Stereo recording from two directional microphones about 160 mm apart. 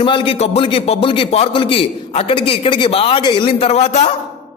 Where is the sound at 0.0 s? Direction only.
35° left (ahead or behind).